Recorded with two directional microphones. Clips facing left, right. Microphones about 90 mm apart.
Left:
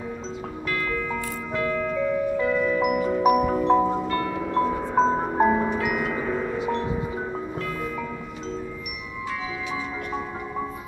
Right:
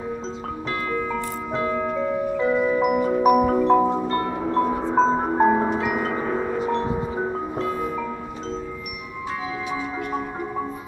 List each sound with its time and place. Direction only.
0.8 s music: 25° right (ahead or behind)
2.8 s marimba: 35° right (ahead or behind)
4.0 s music: 30° right (ahead or behind)
4.6 s music: 20° right (ahead or behind)
5.8 s tubular bells: 30° right (ahead or behind)
6.6 s music: 35° right (ahead or behind)